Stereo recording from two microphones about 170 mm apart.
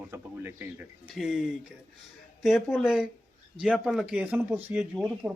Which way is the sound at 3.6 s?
5° right (ahead or behind).